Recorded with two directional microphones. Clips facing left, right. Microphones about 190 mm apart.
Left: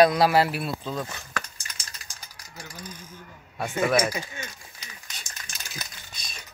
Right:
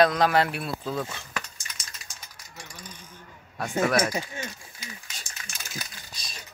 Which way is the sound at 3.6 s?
5° left (ahead or behind).